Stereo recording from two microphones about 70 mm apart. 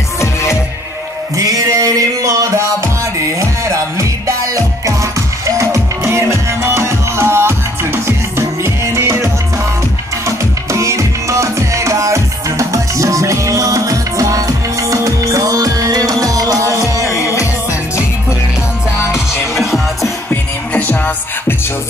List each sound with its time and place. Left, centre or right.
1.3 s music: right
17.1 s music: left
19.6 s music: centre
20.2 s music: left